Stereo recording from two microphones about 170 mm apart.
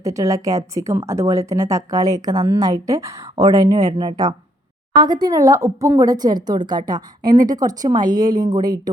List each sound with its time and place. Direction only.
0.0 s speech: 20° right (ahead or behind)
7.2 s a woman's voice: 55° right (ahead or behind)
7.4 s speech: 20° right (ahead or behind)